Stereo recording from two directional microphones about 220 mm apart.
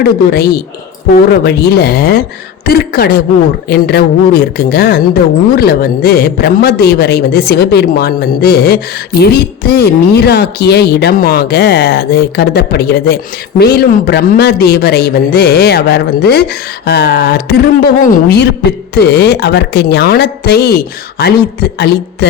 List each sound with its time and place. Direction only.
0.0 s speech: 45° left (ahead or behind)